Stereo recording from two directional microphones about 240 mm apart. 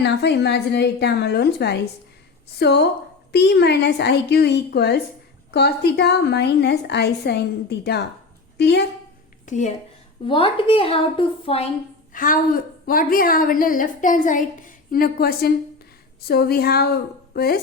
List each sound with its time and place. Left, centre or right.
0.0 s a woman's voice: left
9.5 s a woman's voice: left
12.1 s a woman's voice: left